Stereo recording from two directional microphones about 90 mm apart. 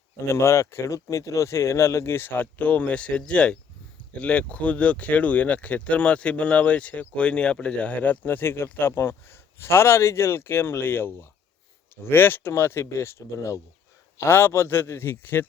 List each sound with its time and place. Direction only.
0.2 s speech: 30° left (ahead or behind)